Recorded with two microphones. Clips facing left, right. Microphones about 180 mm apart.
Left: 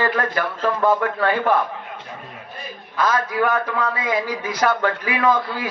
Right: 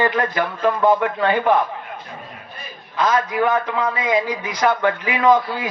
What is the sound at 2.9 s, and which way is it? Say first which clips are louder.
A man's voice: right 2 dB; 20° right (ahead or behind).